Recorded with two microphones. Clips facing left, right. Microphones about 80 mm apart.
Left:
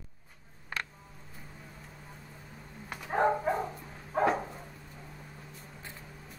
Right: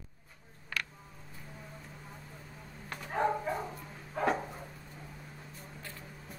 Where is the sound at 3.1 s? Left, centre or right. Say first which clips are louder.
Left 4 dB; left.